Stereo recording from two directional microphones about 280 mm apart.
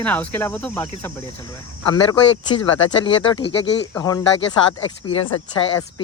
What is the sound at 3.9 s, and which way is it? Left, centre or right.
Speech, centre.